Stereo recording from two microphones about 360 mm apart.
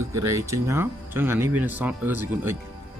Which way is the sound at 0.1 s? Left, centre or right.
Centre.